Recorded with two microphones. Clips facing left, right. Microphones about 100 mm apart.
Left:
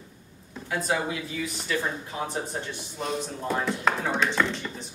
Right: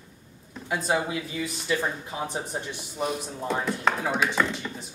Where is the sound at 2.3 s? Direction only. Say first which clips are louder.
Even; 15° right (ahead or behind).